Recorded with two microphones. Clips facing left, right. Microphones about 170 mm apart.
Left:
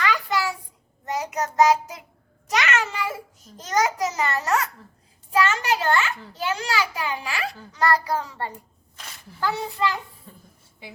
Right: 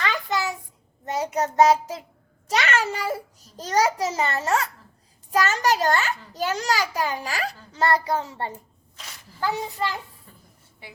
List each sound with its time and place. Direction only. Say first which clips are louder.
0.0 s a sound: left 2 dB; 25° right (ahead or behind)
1.0 s child singing: right 2 dB; 30° right (ahead or behind)
2.5 s a child's voice: right 1 dB; 30° right (ahead or behind)
5.3 s a child's voice: even; 40° right (ahead or behind)
7.7 s a child's voice: even; 25° right (ahead or behind)